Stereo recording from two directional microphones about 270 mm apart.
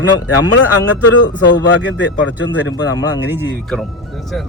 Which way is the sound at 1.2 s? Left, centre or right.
Left.